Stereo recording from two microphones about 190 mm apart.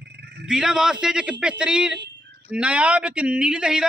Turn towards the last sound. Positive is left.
turn(degrees=-5)  # may be behind; listen again after turning